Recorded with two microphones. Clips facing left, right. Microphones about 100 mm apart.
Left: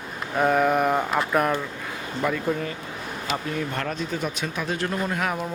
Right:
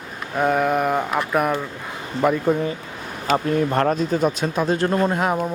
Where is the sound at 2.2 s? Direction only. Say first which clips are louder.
Right 6 dB; 25° right (ahead or behind).